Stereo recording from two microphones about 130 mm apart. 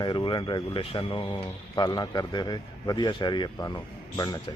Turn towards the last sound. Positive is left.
turn(degrees=30)  # may be behind; listen again after turning